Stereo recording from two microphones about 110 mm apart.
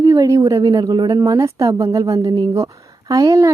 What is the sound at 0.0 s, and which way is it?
A woman's voice, 30° right (ahead or behind).